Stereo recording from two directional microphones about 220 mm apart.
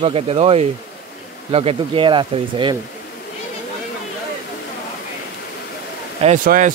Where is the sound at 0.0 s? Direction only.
25° right (ahead or behind).